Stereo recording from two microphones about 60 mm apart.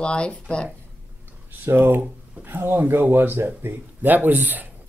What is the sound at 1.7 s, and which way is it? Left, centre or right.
Speech, right.